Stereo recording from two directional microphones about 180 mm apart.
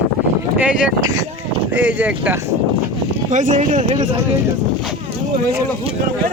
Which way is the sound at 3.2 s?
45° right (ahead or behind).